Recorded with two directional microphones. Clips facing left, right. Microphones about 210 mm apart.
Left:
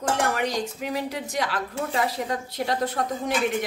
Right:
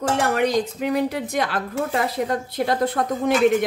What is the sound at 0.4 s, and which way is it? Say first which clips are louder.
A woman's voice: right 6 dB; 60° right (ahead or behind).